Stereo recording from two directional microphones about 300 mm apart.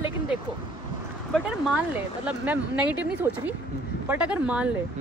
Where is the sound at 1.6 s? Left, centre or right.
Centre.